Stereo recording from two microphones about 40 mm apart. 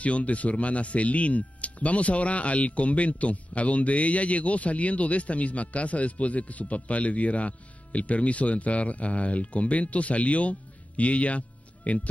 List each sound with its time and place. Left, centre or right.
0.0 s speech: left